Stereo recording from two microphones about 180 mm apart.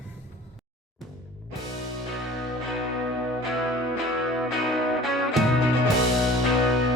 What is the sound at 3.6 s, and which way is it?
Music, centre (ahead or behind).